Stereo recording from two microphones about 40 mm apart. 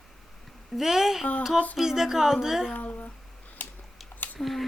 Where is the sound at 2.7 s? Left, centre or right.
Left.